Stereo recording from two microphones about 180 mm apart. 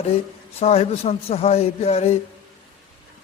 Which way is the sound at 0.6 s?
35° left (ahead or behind).